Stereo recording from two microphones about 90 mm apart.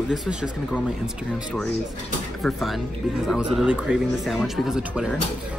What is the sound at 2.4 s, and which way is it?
Speech, centre (ahead or behind).